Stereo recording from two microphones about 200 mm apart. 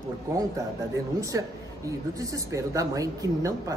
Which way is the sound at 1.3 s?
15° right (ahead or behind).